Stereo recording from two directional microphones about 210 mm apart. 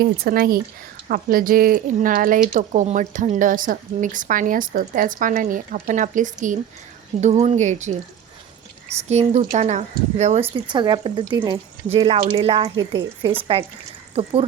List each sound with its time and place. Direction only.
0.0 s speech: 45° right (ahead or behind)
9.0 s speech: 30° right (ahead or behind)
10.5 s speech: 20° right (ahead or behind)
11.9 s speech: 30° right (ahead or behind)